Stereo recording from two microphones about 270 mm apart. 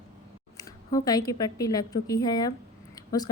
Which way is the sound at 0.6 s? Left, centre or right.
Centre.